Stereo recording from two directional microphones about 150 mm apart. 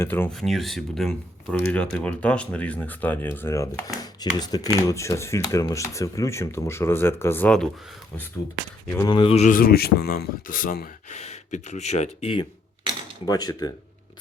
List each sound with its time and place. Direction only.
0.0 s speech: 15° left (ahead or behind)
0.3 s speech: centre (ahead or behind)
9.0 s speech: 35° left (ahead or behind)
9.4 s speech: 65° left (ahead or behind)
11.2 s speech: 50° left (ahead or behind)
13.2 s speech: 25° left (ahead or behind)